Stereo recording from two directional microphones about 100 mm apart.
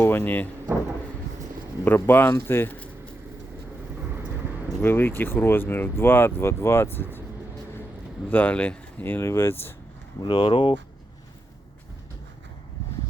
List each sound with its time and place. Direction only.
0.0 s speech: 20° left (ahead or behind)
1.8 s speech: 20° left (ahead or behind)
4.8 s speech: 25° left (ahead or behind)
8.3 s speech: 15° left (ahead or behind)
10.2 s speech: 55° left (ahead or behind)